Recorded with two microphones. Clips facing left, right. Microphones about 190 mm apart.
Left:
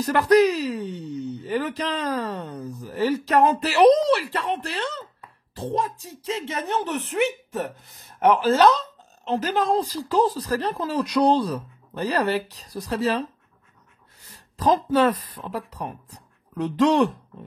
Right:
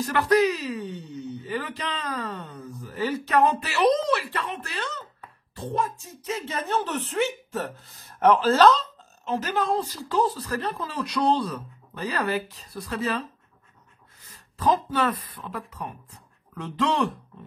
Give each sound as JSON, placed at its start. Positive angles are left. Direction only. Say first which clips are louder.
{"t": 0.0, "sound": "speech", "louder": "left 4 dB", "side_deg": 40}
{"t": 6.2, "sound": "speech", "louder": "left 2 dB", "side_deg": 25}
{"t": 9.2, "sound": "speech", "louder": "left 3 dB", "side_deg": 35}
{"t": 14.6, "sound": "speech", "louder": "left 4 dB", "side_deg": 40}